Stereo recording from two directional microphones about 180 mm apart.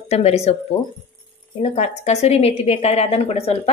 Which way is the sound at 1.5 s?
35° left (ahead or behind).